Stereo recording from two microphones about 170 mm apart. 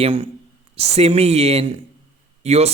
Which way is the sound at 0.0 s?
35° right (ahead or behind).